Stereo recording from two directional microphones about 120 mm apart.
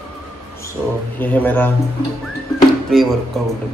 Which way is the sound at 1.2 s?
15° left (ahead or behind).